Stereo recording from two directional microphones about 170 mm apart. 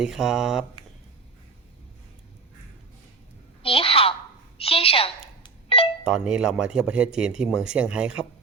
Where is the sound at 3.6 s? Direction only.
35° left (ahead or behind).